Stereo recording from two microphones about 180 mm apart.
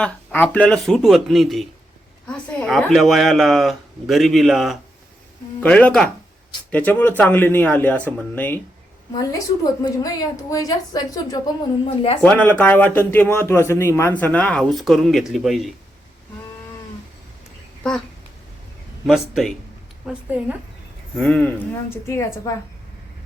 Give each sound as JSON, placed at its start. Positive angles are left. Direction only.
{"t": 0.0, "sound": "speech", "side_deg": 5}
{"t": 9.8, "sound": "speech", "side_deg": 20}
{"t": 11.9, "sound": "speech", "side_deg": 30}
{"t": 12.2, "sound": "speech", "side_deg": 10}
{"t": 19.0, "sound": "a woman's voice", "side_deg": 0}
{"t": 21.2, "sound": "speech", "side_deg": 5}